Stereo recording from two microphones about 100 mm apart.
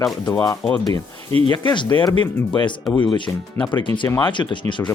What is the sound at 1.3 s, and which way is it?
Speech, 80° right.